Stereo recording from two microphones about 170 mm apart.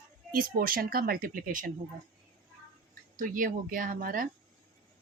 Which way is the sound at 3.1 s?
50° right (ahead or behind).